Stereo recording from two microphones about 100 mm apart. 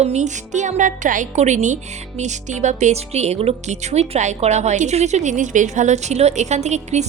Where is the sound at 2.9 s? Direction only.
90° right.